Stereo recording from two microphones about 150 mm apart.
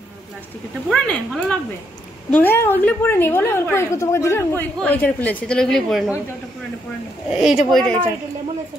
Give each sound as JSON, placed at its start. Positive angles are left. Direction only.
{"t": 0.8, "sound": "a woman's voice", "side_deg": 5}
{"t": 7.2, "sound": "a woman's voice", "side_deg": -5}